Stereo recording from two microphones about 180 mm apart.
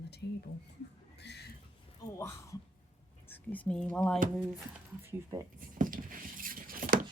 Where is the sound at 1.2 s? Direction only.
70° left (ahead or behind).